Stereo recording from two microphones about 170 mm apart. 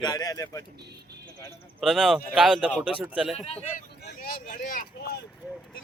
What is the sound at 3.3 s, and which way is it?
Speech, 35° left (ahead or behind).